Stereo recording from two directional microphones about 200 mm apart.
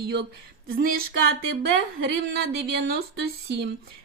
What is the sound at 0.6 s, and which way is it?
Speech, 45° right (ahead or behind).